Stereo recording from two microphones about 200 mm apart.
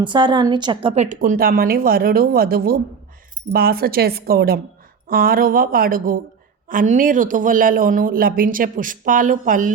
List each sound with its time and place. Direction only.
0.0 s a woman's voice: 25° right (ahead or behind); by 9.7 s 40° right (ahead or behind)